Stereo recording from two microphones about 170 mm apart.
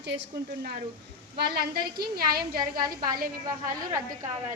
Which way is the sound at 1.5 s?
65° right (ahead or behind).